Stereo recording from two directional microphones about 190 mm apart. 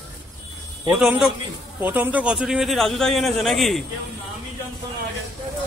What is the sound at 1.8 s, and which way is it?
A man's voice, 10° right (ahead or behind).